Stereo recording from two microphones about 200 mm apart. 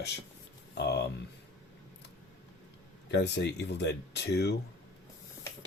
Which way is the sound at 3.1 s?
60° left (ahead or behind).